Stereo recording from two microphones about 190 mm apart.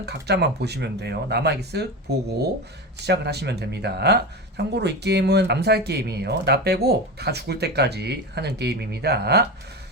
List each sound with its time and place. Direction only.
0.0 s speech: 60° right (ahead or behind)